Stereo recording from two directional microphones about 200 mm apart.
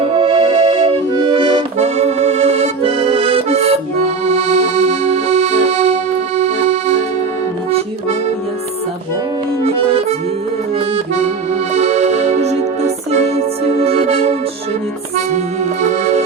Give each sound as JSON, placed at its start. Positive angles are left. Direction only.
{"t": 0.0, "sound": "accordion", "side_deg": -25}
{"t": 9.6, "sound": "accordion", "side_deg": -30}
{"t": 11.7, "sound": "music", "side_deg": -35}
{"t": 15.8, "sound": "music", "side_deg": -35}